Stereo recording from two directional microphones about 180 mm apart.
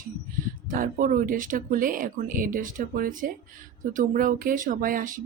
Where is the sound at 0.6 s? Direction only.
50° right (ahead or behind).